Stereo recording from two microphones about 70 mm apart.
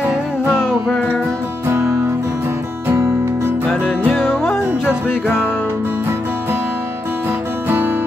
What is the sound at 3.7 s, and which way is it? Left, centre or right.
Music, centre.